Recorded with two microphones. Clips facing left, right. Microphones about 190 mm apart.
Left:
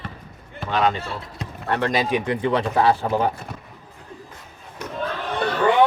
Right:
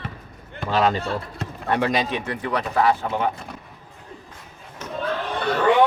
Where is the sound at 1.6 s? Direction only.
15° right (ahead or behind).